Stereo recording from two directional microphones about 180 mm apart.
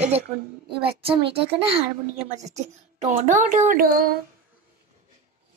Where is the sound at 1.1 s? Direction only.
30° right (ahead or behind).